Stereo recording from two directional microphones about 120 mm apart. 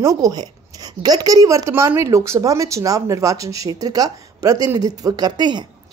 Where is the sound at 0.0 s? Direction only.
30° right (ahead or behind).